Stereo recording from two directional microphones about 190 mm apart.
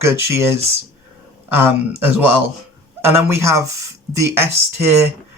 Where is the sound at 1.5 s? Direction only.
10° right (ahead or behind).